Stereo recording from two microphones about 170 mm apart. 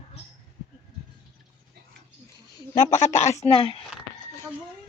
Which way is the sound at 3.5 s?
35° left (ahead or behind).